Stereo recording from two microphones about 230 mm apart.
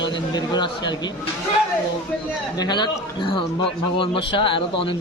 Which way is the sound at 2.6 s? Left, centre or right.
Centre.